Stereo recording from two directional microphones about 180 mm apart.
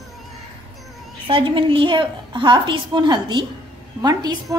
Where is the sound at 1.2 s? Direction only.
30° right (ahead or behind).